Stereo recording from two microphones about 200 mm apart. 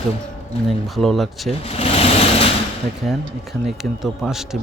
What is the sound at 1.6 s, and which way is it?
Vehicle, 30° left (ahead or behind).